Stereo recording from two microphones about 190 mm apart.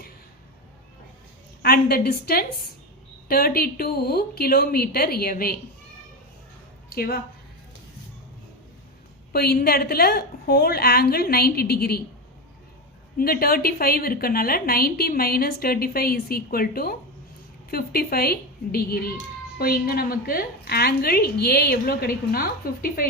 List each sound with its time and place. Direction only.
1.6 s a woman's voice: 50° left (ahead or behind)
6.9 s a woman's voice: 55° left (ahead or behind)
9.3 s a woman's voice: 55° left (ahead or behind)
13.1 s a woman's voice: 50° left (ahead or behind)